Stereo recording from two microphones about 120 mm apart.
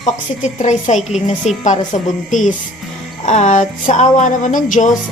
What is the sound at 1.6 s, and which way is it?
Music, 85° left.